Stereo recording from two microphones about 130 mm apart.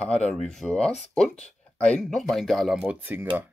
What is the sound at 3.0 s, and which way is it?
Speech, 15° right (ahead or behind).